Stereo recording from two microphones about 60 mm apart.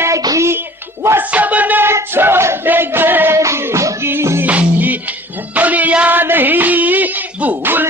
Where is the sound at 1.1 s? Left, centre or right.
Right.